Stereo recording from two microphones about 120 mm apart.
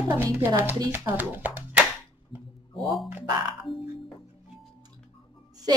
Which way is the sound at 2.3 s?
45° left (ahead or behind).